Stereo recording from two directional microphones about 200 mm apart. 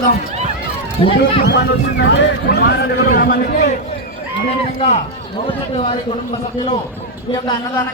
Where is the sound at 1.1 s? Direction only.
60° left (ahead or behind); by 3.8 s 40° left (ahead or behind).